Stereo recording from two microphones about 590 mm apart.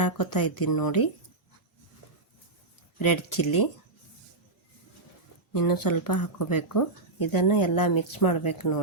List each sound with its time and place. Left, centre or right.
0.0 s speech: left
3.0 s speech: left
5.5 s speech: left